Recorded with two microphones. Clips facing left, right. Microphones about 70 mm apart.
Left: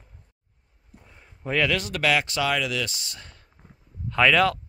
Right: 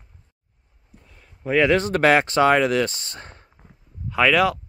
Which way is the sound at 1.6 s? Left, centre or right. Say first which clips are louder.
Right 7 dB; right.